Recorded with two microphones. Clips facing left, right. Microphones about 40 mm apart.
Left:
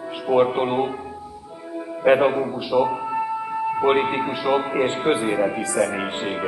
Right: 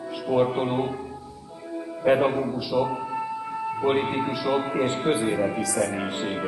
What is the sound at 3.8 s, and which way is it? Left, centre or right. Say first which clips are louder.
A man's voice: left 3 dB; left.